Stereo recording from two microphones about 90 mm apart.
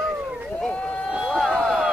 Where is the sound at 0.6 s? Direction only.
10° left (ahead or behind).